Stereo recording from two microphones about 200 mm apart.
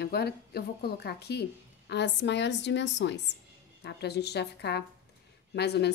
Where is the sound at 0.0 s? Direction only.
55° left (ahead or behind).